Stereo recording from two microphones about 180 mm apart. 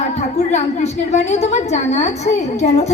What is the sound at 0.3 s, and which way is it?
A woman's voice, 40° left (ahead or behind).